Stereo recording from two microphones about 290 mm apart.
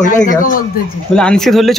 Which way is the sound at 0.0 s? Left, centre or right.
Left.